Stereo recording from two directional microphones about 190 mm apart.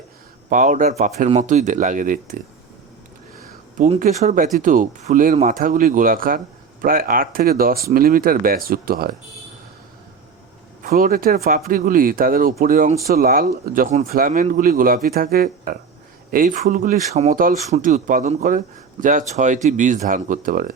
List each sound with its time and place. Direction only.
0.5 s speech: 45° right (ahead or behind)
3.8 s speech: 40° right (ahead or behind)
10.8 s speech: 50° right (ahead or behind)